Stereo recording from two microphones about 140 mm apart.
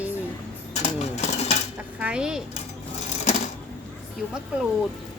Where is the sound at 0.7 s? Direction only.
55° left (ahead or behind).